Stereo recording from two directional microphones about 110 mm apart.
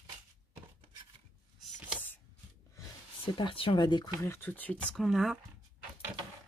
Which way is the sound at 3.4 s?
50° left (ahead or behind).